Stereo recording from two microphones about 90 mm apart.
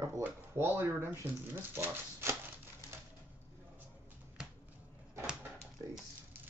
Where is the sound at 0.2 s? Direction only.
25° right (ahead or behind).